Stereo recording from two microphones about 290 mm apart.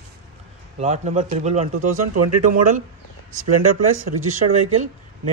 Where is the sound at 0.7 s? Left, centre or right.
Right.